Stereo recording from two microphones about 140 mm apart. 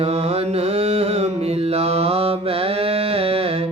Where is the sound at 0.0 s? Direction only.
45° right (ahead or behind).